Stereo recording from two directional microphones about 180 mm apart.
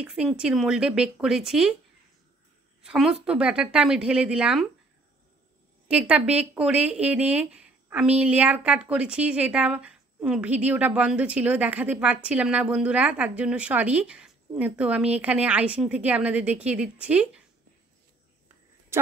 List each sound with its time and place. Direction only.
0.0 s a woman's voice: 5° right (ahead or behind)
2.8 s a woman's voice: 5° right (ahead or behind)
5.9 s speech: 5° right (ahead or behind)